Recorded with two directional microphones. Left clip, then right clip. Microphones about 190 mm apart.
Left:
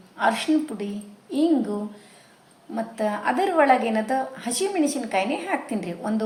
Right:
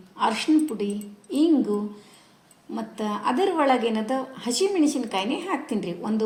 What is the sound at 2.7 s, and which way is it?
A woman's voice, 15° right (ahead or behind).